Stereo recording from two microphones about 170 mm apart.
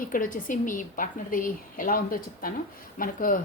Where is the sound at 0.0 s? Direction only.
55° left (ahead or behind).